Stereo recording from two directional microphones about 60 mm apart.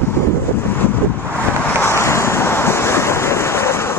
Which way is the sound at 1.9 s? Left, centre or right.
Left.